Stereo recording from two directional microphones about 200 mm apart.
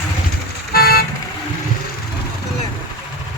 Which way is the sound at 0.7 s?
50° left (ahead or behind).